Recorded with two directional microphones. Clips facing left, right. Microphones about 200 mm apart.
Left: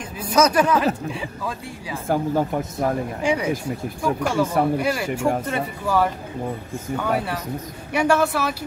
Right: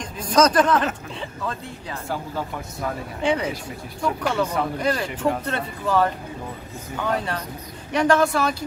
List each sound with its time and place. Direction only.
0.2 s speech: 10° left (ahead or behind)
2.0 s speech: 50° left (ahead or behind)
3.2 s speech: 10° left (ahead or behind)